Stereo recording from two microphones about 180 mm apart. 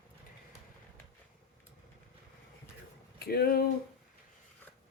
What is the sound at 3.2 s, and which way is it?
Speech, 60° left (ahead or behind).